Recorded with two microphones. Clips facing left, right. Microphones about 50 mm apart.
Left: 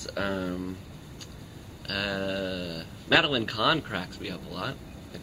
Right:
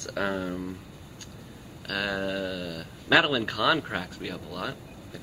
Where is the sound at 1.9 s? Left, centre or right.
Centre.